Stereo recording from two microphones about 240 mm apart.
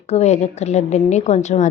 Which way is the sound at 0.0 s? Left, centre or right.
Left.